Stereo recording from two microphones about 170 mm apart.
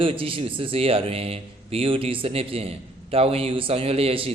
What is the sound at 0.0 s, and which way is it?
A man's voice, 30° right (ahead or behind).